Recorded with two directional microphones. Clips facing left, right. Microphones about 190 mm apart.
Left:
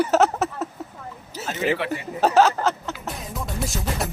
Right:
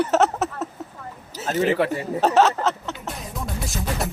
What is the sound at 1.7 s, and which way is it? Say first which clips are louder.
Speech: right 4 dB; 40° right (ahead or behind).